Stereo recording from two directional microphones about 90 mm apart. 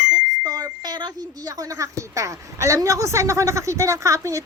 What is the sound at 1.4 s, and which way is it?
Speech, 40° right (ahead or behind).